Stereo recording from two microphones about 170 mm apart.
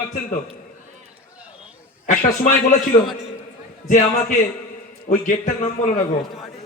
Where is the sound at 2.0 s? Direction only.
50° left (ahead or behind).